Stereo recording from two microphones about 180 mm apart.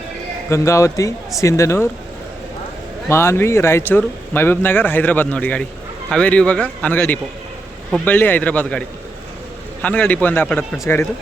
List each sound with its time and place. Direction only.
0.5 s speech: 15° left (ahead or behind)
3.1 s speech: 15° left (ahead or behind)
9.8 s speech: 5° left (ahead or behind)